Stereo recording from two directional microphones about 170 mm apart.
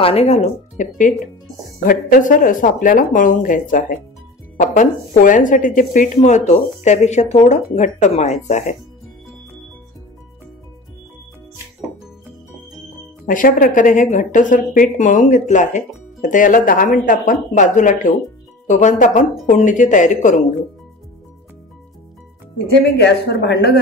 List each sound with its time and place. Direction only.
0.0 s speech: 35° left (ahead or behind)
13.2 s speech: 50° left (ahead or behind)
22.9 s a woman's voice: 80° left